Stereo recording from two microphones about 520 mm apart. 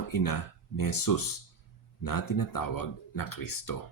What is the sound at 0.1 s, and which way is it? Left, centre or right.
Speech, left.